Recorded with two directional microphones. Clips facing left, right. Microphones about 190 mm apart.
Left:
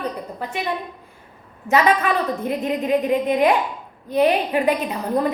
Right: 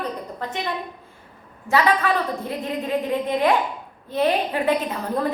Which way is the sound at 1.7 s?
20° left (ahead or behind).